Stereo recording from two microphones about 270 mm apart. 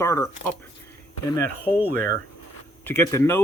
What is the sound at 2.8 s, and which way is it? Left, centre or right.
Speech, centre.